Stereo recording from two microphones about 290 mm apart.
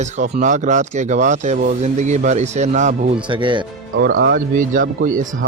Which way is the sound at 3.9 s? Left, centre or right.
Right.